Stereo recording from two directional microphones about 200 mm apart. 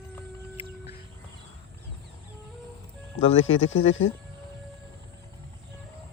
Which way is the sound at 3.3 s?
80° left.